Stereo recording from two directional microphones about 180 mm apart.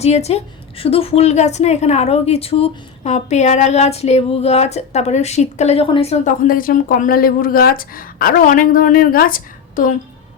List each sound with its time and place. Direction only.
0.0 s a woman's voice: 35° left (ahead or behind)